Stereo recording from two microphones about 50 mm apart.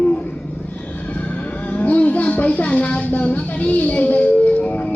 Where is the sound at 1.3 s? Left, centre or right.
Left.